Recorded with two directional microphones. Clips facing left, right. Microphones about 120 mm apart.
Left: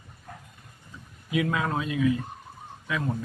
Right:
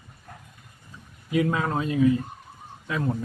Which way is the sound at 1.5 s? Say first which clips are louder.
Right 2 dB; 30° right (ahead or behind).